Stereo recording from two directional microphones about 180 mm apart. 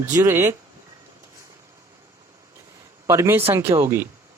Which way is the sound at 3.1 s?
15° right (ahead or behind).